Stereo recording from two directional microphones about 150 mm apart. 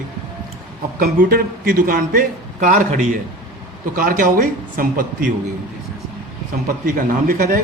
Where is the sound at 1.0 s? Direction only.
75° right (ahead or behind).